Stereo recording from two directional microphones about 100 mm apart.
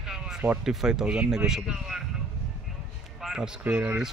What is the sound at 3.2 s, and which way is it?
Speech, 5° right (ahead or behind).